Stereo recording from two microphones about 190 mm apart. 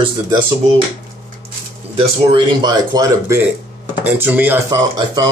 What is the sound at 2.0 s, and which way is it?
Speech, 25° right (ahead or behind).